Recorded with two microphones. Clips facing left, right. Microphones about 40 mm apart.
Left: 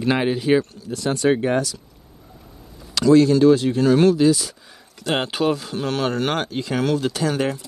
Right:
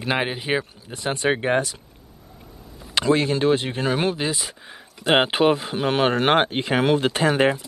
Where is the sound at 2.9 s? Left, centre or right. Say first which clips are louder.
Left 6 dB; right.